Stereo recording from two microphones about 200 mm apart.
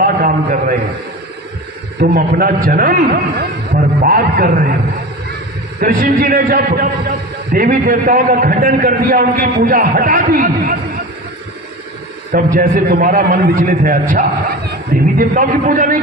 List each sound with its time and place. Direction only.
0.0 s a man's voice: 45° right (ahead or behind)
2.0 s a man's voice: 50° right (ahead or behind)
5.8 s a man's voice: 45° right (ahead or behind)
12.5 s a man's voice: 50° right (ahead or behind)